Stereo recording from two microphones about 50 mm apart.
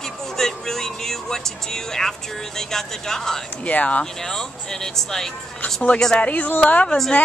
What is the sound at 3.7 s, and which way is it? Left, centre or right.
Speech, left.